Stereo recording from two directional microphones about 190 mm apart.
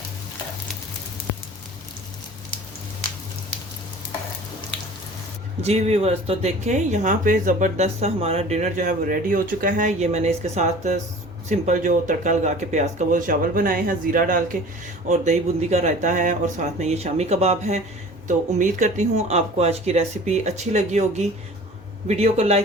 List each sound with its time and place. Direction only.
5.6 s speech: 35° right (ahead or behind)